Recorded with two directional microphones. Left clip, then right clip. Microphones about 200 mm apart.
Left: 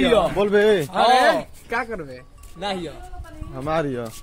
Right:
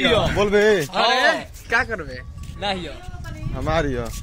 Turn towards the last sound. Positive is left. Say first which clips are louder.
# right 1 dB
turn(degrees=-5)  # may be behind; listen again after turning